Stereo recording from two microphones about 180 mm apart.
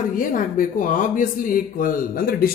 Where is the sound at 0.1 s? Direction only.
50° left (ahead or behind).